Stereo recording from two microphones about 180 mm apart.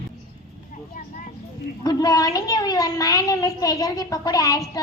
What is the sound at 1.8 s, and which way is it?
A child's voice, 20° left (ahead or behind).